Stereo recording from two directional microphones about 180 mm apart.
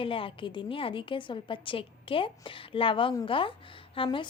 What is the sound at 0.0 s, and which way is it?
A woman's voice, 30° left (ahead or behind).